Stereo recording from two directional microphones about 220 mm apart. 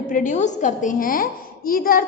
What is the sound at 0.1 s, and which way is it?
A woman's voice, 35° left (ahead or behind).